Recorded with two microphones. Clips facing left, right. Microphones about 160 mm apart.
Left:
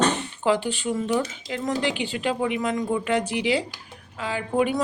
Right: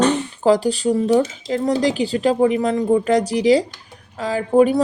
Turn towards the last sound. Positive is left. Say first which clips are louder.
# right 8 dB
turn(degrees=-40)  # may be behind; listen again after turning